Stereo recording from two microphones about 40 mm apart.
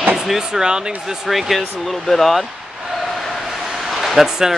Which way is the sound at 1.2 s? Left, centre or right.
Centre.